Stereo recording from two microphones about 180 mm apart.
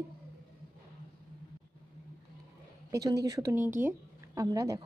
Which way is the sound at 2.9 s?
20° right (ahead or behind).